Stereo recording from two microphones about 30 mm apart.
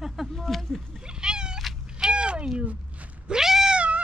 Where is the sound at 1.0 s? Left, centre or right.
Right.